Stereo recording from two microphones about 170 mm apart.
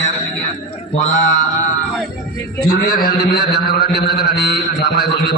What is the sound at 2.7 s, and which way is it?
A man's voice, 60° left (ahead or behind).